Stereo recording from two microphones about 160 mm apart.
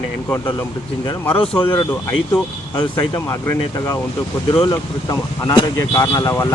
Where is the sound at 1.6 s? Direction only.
30° left (ahead or behind).